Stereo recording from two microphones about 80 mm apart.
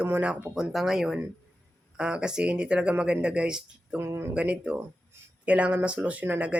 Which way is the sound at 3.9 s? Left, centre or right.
Right.